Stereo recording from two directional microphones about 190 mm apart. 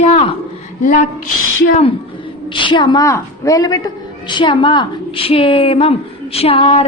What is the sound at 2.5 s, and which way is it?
A woman's voice, 25° left (ahead or behind).